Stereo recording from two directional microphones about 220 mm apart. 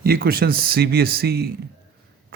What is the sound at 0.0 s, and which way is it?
Speech, 45° right (ahead or behind).